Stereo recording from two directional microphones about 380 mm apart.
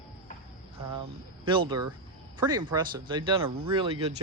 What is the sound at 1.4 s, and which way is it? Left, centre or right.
Speech, centre.